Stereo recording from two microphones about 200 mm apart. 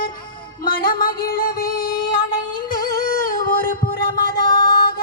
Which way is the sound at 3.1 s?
45° left (ahead or behind).